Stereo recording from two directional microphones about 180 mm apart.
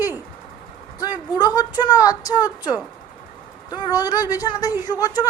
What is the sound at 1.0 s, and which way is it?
A woman's voice, 25° left (ahead or behind).